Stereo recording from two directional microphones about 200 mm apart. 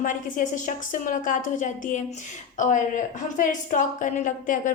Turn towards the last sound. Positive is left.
turn(degrees=40)  # may be behind; listen again after turning